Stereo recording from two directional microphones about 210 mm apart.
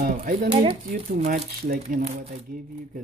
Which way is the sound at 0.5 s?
25° right (ahead or behind).